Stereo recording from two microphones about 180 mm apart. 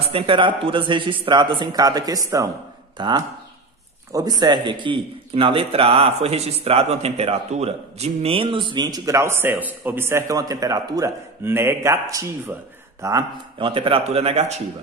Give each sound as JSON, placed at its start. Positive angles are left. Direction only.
{"t": 0.0, "sound": "a man's voice", "side_deg": -30}